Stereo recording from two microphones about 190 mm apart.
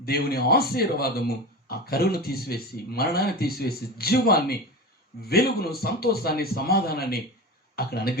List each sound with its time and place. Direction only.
0.0 s a man's voice: 55° left (ahead or behind)